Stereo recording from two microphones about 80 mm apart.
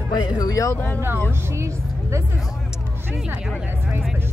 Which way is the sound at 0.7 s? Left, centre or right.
Left.